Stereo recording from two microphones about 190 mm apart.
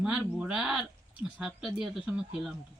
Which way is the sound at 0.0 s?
5° right (ahead or behind).